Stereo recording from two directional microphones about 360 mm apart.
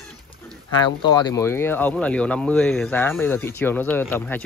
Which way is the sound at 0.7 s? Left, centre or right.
Centre.